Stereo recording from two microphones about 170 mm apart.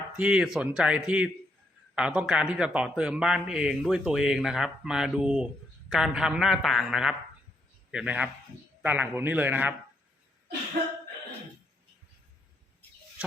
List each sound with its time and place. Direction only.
0.2 s a man's voice: 5° right (ahead or behind)